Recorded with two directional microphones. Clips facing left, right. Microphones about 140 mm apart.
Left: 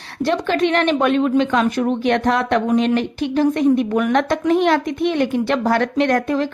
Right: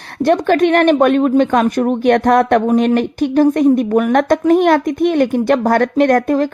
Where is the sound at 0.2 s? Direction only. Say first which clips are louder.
Right 6 dB; 50° right (ahead or behind).